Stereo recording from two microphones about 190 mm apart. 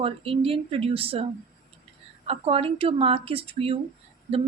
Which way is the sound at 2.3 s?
30° right (ahead or behind).